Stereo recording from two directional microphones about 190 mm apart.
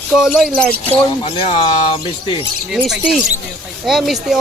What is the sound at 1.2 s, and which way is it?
Speech, 25° left (ahead or behind).